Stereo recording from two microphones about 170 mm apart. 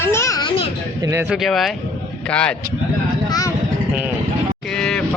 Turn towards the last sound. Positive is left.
turn(degrees=5)  # may be behind; listen again after turning